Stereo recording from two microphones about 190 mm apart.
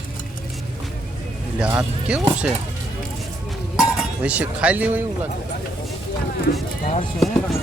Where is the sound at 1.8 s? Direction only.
5° right (ahead or behind).